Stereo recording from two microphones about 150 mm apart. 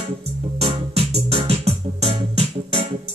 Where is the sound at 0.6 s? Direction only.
40° right (ahead or behind).